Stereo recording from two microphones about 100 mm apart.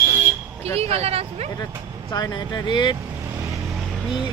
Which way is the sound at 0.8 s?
90° right.